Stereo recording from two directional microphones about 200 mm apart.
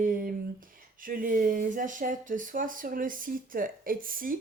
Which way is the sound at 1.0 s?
45° right (ahead or behind).